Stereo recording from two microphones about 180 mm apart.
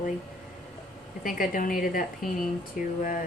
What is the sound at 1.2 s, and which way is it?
Speech, 50° left (ahead or behind).